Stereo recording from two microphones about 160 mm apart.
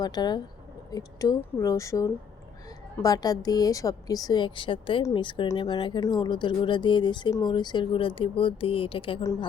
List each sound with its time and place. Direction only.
0.0 s speech: 25° left (ahead or behind)